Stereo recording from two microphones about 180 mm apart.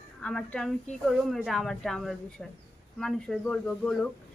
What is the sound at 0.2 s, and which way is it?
Speech, 5° left (ahead or behind).